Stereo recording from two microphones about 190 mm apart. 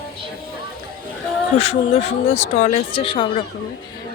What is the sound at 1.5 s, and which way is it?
Speech, 35° left (ahead or behind).